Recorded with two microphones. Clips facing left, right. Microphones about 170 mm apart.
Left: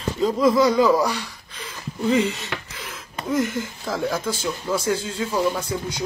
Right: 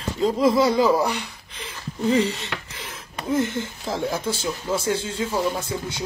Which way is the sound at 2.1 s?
35° right (ahead or behind).